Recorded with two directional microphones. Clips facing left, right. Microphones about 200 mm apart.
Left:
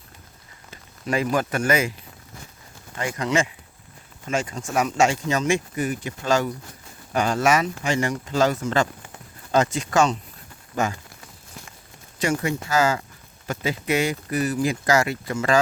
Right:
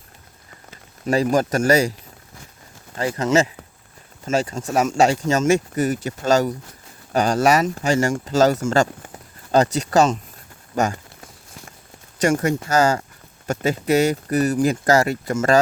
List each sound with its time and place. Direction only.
1.0 s speech: 40° right (ahead or behind)
2.9 s speech: 35° right (ahead or behind)
12.2 s speech: 45° right (ahead or behind)